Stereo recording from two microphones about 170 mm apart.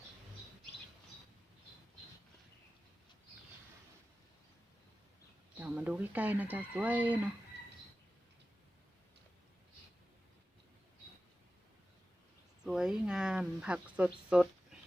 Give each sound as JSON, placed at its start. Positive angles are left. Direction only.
{"t": 5.5, "sound": "speech", "side_deg": -10}
{"t": 12.6, "sound": "speech", "side_deg": 0}